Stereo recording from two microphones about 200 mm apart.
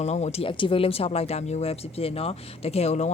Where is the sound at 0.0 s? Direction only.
35° left (ahead or behind).